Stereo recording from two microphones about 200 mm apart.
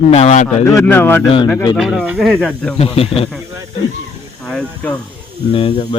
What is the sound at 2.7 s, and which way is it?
Speech, 30° left (ahead or behind).